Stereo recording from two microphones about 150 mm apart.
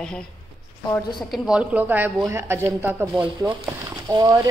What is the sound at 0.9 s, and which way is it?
Speech, 25° left (ahead or behind).